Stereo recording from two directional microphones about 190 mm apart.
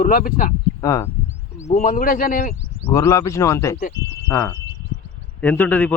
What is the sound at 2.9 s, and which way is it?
A man's voice, 15° left (ahead or behind).